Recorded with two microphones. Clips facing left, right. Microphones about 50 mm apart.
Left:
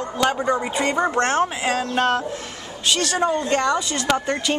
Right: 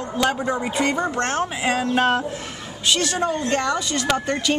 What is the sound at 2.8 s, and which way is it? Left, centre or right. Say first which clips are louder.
Speech: left 1 dB; centre.